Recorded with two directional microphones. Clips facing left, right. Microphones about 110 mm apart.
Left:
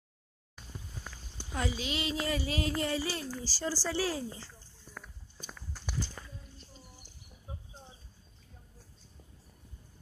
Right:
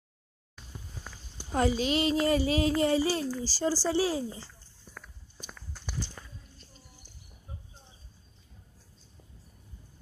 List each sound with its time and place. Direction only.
1.5 s a child's voice: 40° right (ahead or behind)
2.2 s child singing: 35° right (ahead or behind)
2.8 s speech: 25° right (ahead or behind)
5.5 s walk: 5° left (ahead or behind)